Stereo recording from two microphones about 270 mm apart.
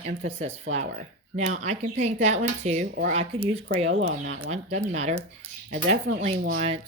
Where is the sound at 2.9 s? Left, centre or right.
Right.